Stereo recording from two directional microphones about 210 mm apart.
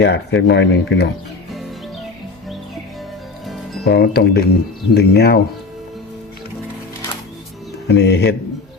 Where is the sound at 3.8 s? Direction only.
50° left (ahead or behind).